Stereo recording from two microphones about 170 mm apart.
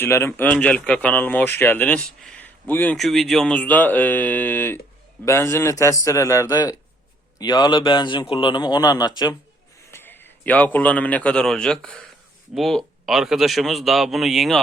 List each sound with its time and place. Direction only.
0.0 s a man's voice: 15° left (ahead or behind)
9.9 s a man's voice: 10° left (ahead or behind)